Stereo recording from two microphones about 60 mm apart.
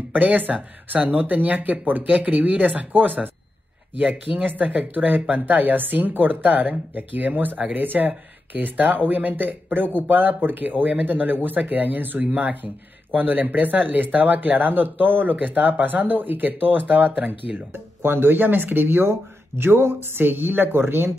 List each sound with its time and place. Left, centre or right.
0.1 s speech: right